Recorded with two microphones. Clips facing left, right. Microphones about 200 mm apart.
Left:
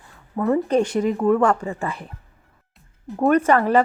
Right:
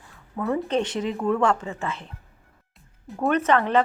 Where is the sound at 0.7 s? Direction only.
10° left (ahead or behind).